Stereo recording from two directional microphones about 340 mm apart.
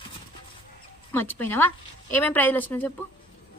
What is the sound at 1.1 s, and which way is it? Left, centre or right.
Speech, centre.